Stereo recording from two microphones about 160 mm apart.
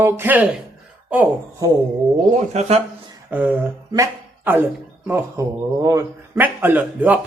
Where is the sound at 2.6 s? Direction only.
45° right (ahead or behind).